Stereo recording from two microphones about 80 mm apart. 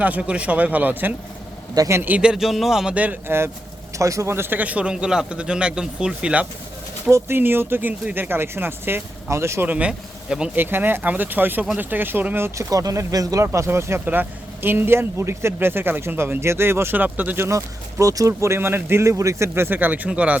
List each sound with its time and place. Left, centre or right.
0.0 s speech: centre
2.3 s speech: centre
2.9 s speech: right
3.9 s a man's voice: right; by 6.5 s centre
7.1 s speech: right
9.6 s speech: centre
10.5 s speech: right
12.5 s speech: right
13.4 s speech: right
17.5 s speech: right; by 20.4 s centre